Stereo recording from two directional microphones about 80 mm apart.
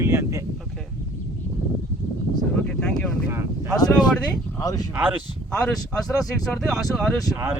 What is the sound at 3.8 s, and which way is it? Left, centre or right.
Speech, left.